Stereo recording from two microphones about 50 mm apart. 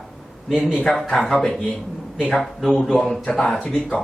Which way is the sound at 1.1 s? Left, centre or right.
Centre.